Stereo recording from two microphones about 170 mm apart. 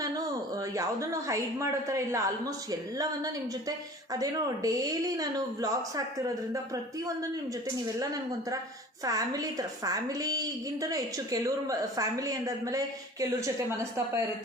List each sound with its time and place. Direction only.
0.0 s a woman's voice: 20° right (ahead or behind)
7.9 s a woman's voice: 20° right (ahead or behind)